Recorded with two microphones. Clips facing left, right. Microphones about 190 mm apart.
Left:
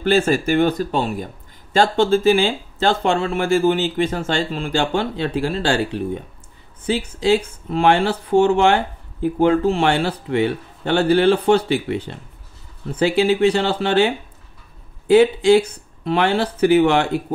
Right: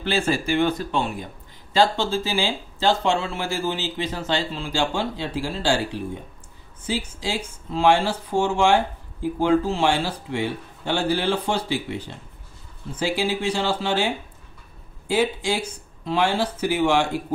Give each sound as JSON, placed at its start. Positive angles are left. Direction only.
{"t": 0.3, "sound": "speech", "side_deg": 45}
{"t": 6.9, "sound": "speech", "side_deg": 60}